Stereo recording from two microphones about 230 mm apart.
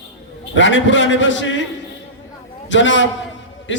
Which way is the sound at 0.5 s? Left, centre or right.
Left.